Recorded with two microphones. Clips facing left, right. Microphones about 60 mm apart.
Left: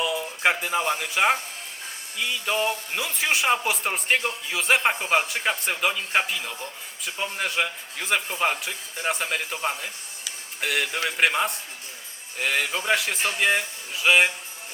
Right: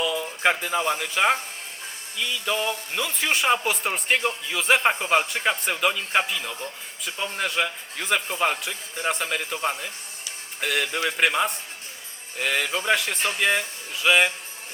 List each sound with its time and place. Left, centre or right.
0.0 s a man's voice: centre
3.0 s a man's voice: centre